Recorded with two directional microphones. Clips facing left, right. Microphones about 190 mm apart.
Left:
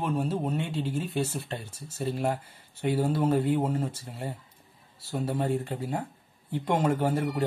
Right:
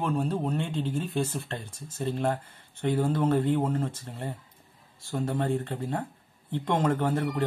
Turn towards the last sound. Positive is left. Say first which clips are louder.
# even
turn(degrees=10)  # may be behind; listen again after turning